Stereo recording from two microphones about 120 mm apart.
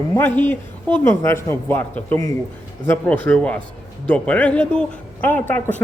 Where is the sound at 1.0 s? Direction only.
20° left (ahead or behind).